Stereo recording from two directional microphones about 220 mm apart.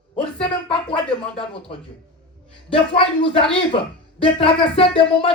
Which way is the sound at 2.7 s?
25° left (ahead or behind).